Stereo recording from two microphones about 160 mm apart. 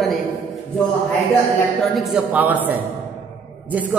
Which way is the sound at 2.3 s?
10° right (ahead or behind).